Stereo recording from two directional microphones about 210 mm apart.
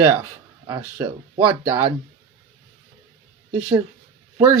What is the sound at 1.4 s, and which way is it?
Speech, 20° right (ahead or behind).